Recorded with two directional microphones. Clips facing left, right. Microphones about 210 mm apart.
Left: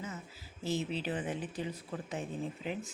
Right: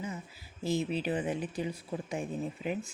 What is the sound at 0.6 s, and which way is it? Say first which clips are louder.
Speech: right 4 dB; 15° right (ahead or behind).